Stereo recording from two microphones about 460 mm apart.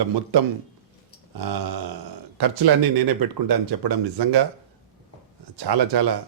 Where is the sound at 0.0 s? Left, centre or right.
Right.